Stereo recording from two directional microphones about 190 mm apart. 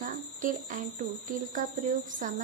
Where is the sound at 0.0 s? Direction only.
45° right (ahead or behind).